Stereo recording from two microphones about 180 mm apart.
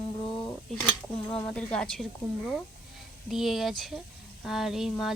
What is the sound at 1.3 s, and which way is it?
Speech, 5° left (ahead or behind).